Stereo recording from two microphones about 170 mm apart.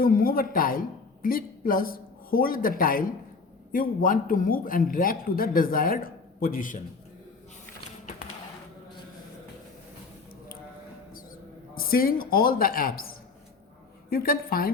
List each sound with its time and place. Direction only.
0.0 s a man's voice: 55° left (ahead or behind)
11.7 s a man's voice: 60° left (ahead or behind)
14.1 s a man's voice: 60° left (ahead or behind)